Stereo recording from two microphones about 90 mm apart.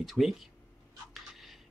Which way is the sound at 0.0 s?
Centre (ahead or behind).